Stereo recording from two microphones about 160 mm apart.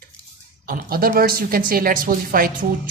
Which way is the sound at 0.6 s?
65° right (ahead or behind).